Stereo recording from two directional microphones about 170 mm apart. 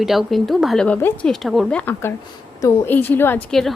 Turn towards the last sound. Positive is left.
turn(degrees=10)  # may be behind; listen again after turning